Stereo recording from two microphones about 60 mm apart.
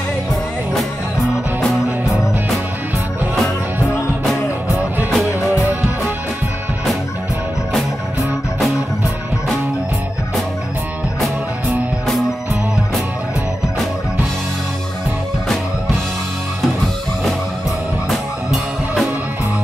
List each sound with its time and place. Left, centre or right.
2.0 s music: centre
5.1 s music: centre
5.5 s music: right
18.1 s music: centre